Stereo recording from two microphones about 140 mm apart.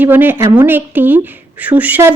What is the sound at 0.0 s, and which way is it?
A woman's voice, 15° right (ahead or behind).